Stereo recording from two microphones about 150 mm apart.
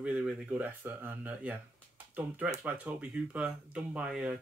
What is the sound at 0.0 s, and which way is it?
Speech, centre (ahead or behind).